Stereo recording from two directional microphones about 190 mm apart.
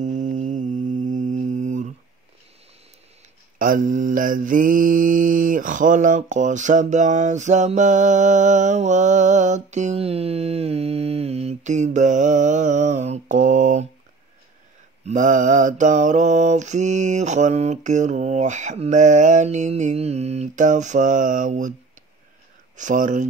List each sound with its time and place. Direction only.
0.0 s mantra: 40° right (ahead or behind)
3.5 s mantra: 45° right (ahead or behind)
15.0 s mantra: 40° right (ahead or behind)
22.8 s mantra: 40° right (ahead or behind)